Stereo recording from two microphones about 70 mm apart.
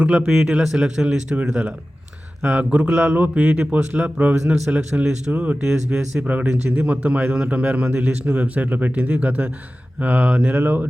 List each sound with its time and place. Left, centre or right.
0.4 s a man's voice: centre
5.3 s a man's voice: right
5.6 s a man's voice: centre